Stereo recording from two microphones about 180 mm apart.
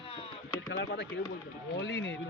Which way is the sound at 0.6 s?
75° left (ahead or behind).